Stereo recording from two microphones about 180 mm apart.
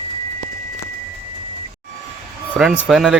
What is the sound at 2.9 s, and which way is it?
Speech, 5° right (ahead or behind).